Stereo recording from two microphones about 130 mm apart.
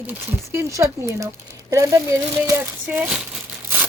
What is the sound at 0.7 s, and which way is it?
Speech, 25° right (ahead or behind).